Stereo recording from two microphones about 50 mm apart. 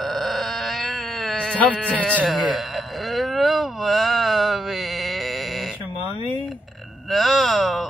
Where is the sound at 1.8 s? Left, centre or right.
Left.